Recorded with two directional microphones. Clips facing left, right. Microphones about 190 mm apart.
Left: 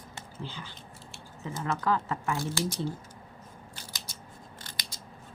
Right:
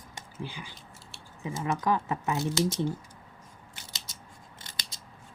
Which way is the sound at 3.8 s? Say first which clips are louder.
Left 2 dB; 20° right (ahead or behind).